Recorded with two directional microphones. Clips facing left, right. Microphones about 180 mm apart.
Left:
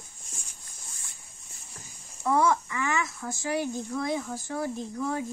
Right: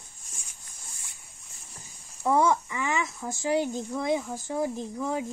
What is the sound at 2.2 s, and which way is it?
Speech, 20° right (ahead or behind).